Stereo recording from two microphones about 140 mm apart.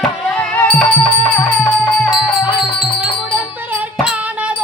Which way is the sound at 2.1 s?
5° right (ahead or behind).